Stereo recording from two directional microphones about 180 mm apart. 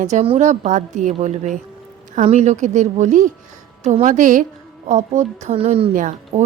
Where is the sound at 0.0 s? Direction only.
40° right (ahead or behind).